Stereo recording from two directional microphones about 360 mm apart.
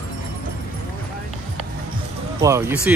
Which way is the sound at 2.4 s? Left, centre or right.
Centre.